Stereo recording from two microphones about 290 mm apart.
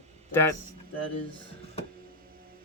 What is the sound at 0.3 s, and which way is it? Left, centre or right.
Speech, centre.